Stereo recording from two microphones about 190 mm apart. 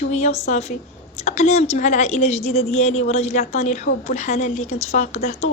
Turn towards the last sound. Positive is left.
turn(degrees=35)  # may be behind; listen again after turning